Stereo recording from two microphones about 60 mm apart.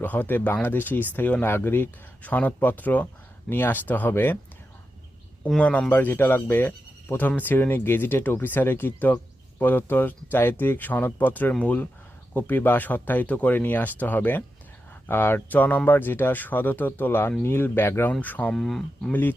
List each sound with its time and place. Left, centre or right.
0.0 s speech: left
2.2 s speech: left
5.5 s speech: centre
5.9 s speech: left
18.2 s speech: left
18.5 s speech: centre